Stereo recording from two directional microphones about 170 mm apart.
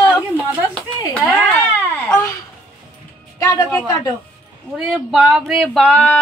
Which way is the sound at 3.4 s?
20° left (ahead or behind).